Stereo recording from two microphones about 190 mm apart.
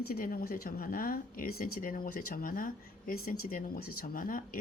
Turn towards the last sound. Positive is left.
turn(degrees=45)  # may be behind; listen again after turning